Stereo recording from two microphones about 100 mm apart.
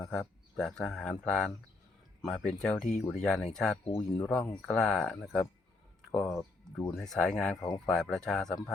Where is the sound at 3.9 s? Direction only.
25° left (ahead or behind).